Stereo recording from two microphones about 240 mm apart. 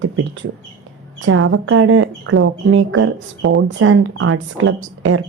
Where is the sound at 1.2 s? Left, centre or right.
Right.